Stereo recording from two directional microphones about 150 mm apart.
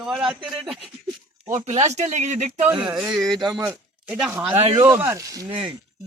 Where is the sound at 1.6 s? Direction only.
50° right (ahead or behind).